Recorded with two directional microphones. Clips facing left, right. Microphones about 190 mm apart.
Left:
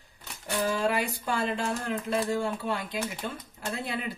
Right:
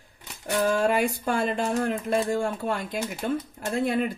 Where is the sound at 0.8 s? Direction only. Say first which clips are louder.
Right 5 dB; 50° right (ahead or behind).